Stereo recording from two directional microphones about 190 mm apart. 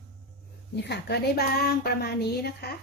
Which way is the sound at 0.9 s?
60° left (ahead or behind).